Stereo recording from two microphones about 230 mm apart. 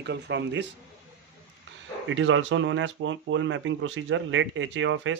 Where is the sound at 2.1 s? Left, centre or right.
Right.